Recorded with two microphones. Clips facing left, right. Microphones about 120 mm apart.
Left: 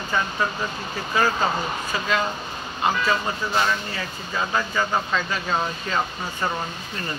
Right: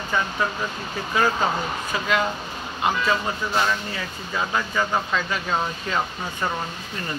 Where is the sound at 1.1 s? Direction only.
5° right (ahead or behind).